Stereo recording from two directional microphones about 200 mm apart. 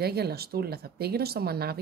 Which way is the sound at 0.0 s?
50° right (ahead or behind).